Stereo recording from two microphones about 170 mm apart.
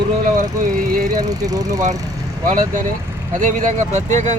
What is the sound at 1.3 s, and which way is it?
Speech, 20° right (ahead or behind).